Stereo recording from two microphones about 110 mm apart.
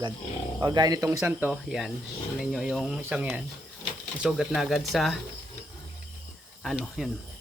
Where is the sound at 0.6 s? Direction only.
35° right (ahead or behind).